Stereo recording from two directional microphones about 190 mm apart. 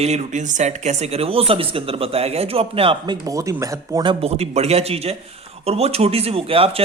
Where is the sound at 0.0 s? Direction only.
35° right (ahead or behind).